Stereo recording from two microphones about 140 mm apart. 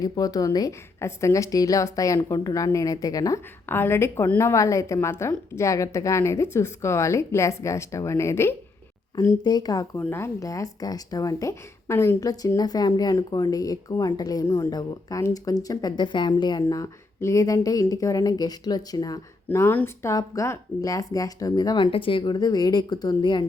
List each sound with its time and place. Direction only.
0.0 s speech: 25° left (ahead or behind)
9.4 s speech: 30° left (ahead or behind)
19.5 s speech: 15° left (ahead or behind); by 23.5 s 30° left (ahead or behind)